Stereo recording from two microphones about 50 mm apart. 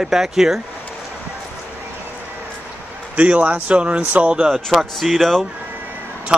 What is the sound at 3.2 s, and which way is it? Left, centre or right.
Speech, right.